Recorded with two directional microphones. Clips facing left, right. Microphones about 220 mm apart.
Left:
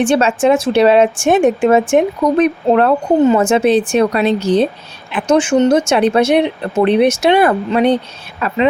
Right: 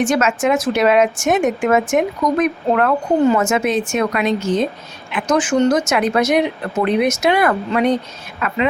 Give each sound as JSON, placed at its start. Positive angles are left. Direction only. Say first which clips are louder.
{"t": 0.0, "sound": "a woman's voice", "louder": "left 4 dB", "side_deg": 30}